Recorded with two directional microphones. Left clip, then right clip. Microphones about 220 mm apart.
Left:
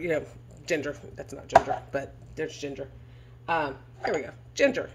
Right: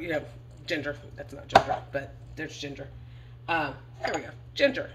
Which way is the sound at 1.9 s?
60° left (ahead or behind).